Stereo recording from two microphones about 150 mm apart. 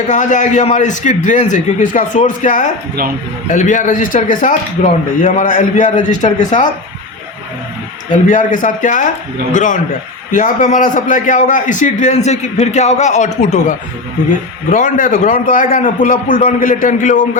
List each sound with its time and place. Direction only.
0.1 s a man's voice: 55° left (ahead or behind)
5.2 s a man's voice: 60° left (ahead or behind)
8.3 s a man's voice: 60° left (ahead or behind)
14.7 s a man's voice: 65° left (ahead or behind)